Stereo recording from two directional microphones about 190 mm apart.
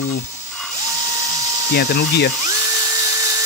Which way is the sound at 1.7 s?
60° left (ahead or behind).